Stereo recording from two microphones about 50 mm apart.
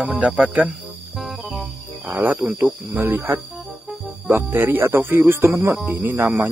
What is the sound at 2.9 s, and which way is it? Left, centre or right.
Speech, right.